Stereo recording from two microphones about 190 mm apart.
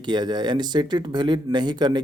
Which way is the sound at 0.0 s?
25° right (ahead or behind).